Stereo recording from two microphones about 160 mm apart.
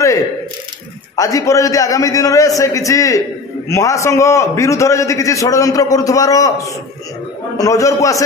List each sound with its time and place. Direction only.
1.1 s a man's voice: 20° left (ahead or behind)